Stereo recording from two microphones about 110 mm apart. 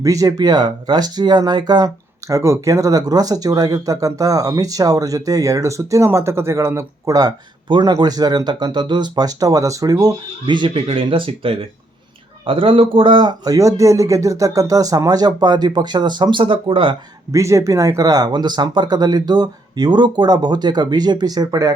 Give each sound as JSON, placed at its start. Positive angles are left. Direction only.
{"t": 0.0, "sound": "speech", "side_deg": -30}
{"t": 2.3, "sound": "speech", "side_deg": -25}
{"t": 13.4, "sound": "speech", "side_deg": -30}
{"t": 17.3, "sound": "speech", "side_deg": -25}